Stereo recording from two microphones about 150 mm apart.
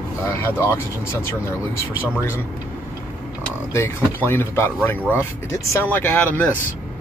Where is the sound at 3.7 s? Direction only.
15° left (ahead or behind).